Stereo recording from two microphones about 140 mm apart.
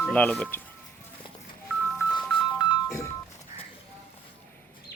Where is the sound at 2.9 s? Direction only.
20° left (ahead or behind).